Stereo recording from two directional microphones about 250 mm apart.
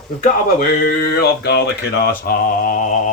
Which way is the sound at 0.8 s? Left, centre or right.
Left.